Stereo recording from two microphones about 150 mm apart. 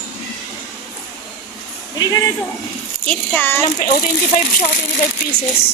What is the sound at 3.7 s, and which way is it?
Speech, 70° left (ahead or behind).